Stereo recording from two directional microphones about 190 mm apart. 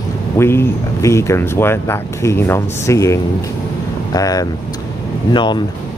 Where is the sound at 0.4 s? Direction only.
15° left (ahead or behind).